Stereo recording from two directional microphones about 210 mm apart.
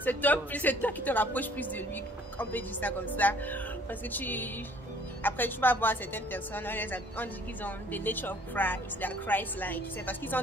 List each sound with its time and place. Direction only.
0.0 s a woman's voice: 10° left (ahead or behind)